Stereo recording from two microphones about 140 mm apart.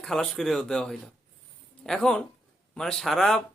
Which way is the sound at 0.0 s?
5° left (ahead or behind).